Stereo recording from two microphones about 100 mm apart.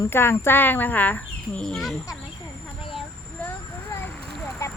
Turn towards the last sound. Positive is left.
turn(degrees=25)  # may be behind; listen again after turning